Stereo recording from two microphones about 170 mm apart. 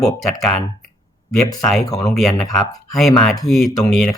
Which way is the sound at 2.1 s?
Centre (ahead or behind).